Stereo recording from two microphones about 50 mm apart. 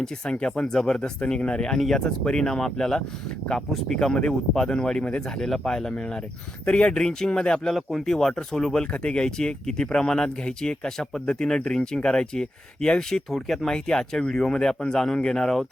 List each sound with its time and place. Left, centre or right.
0.3 s speech: centre
4.0 s speech: centre
5.4 s speech: centre
6.7 s speech: centre
7.8 s speech: centre
8.0 s speech: centre